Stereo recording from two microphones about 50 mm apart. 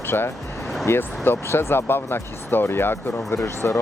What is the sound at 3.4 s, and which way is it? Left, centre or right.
Speech, left.